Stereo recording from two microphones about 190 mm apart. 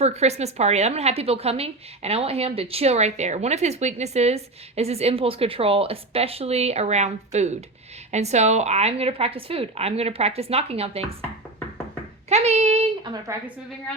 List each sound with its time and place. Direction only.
0.0 s a woman's voice: 35° right (ahead or behind)
12.3 s a woman's voice: 35° right (ahead or behind)
13.3 s a woman's voice: 15° right (ahead or behind)